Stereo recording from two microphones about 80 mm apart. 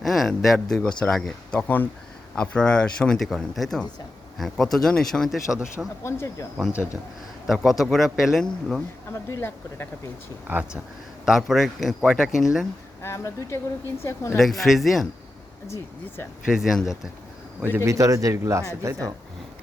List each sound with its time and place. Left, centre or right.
0.0 s speech: centre
1.5 s speech: left; by 5.4 s centre
6.0 s speech: left
7.4 s speech: centre
9.1 s speech: left
10.4 s speech: right
11.3 s speech: centre
13.0 s speech: left
14.3 s speech: centre
15.6 s speech: left
16.5 s speech: centre
17.6 s speech: right
17.8 s speech: right